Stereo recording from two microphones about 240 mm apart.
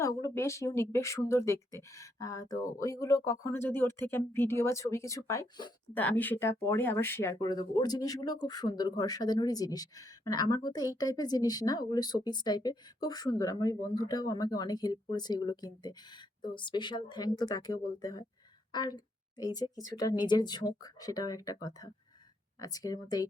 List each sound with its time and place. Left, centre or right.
0.0 s a woman's voice: centre